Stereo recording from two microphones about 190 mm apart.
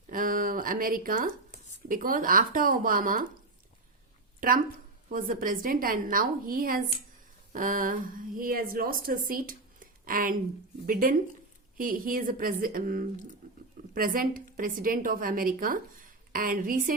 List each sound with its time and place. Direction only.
0.1 s a woman's voice: 45° right (ahead or behind)
4.4 s a woman's voice: 45° right (ahead or behind)